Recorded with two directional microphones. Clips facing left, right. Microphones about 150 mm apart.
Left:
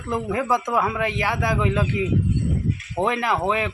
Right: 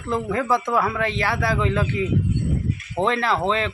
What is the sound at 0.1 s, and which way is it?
Speech, 15° left (ahead or behind).